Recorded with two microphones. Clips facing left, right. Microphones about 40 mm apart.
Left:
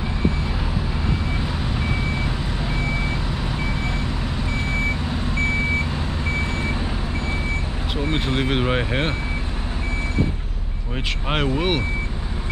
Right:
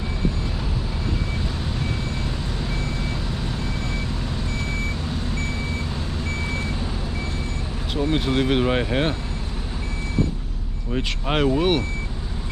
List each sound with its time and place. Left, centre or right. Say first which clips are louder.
2.2 s vehicle: left 2 dB; left
8.0 s speech: right 2 dB; centre
11.0 s speech: right 1 dB; centre